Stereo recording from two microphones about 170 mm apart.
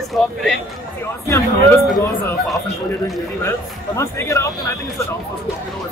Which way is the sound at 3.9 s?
15° left (ahead or behind).